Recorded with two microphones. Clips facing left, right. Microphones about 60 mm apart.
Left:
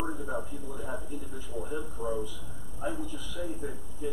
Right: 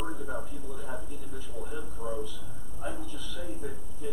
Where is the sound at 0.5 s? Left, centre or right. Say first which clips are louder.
Left 2 dB; centre.